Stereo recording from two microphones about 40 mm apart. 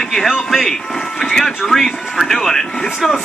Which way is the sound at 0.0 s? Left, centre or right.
Centre.